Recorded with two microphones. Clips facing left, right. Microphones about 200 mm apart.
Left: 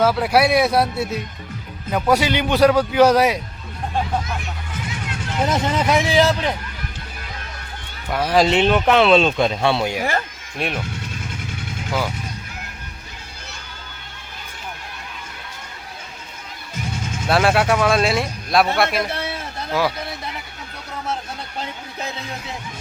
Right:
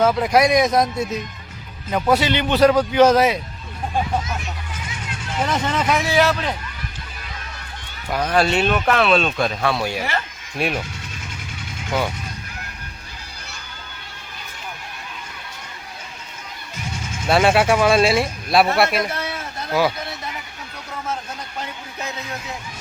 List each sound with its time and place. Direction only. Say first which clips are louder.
0.0 s a man's voice: even; 5° left (ahead or behind)
5.5 s a man's voice: left 2 dB; 10° left (ahead or behind)
8.1 s speech: left 2 dB; 10° left (ahead or behind); by 9.9 s 25° left (ahead or behind)
10.0 s speech: left 3 dB; 45° left (ahead or behind)
10.6 s speech: right 2 dB; 5° right (ahead or behind)
11.9 s speech: right 1 dB; centre (ahead or behind)
17.2 s speech: right 1 dB; centre (ahead or behind)
19.0 s a sound: even; 30° left (ahead or behind)